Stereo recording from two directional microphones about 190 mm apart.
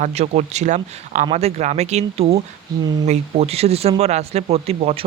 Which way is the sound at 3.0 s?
35° right (ahead or behind).